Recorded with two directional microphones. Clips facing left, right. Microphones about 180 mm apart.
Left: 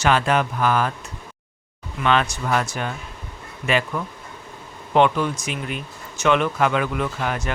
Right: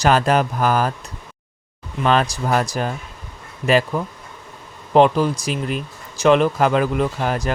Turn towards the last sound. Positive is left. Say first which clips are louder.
# right 4 dB
turn(degrees=-35)  # may be behind; listen again after turning